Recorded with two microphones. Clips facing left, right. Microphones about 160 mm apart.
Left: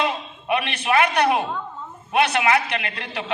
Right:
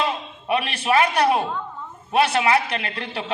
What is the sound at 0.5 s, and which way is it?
A man's voice, 30° right (ahead or behind).